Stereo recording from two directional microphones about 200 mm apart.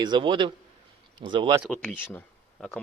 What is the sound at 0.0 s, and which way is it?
Speech, 25° right (ahead or behind).